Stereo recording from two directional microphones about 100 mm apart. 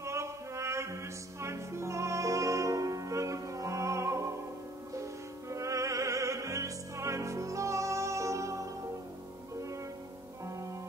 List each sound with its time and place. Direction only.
0.0 s music: 30° right (ahead or behind)
5.5 s music: 30° right (ahead or behind)